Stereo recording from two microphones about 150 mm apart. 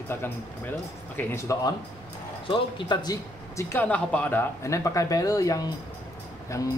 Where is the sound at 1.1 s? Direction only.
20° left (ahead or behind).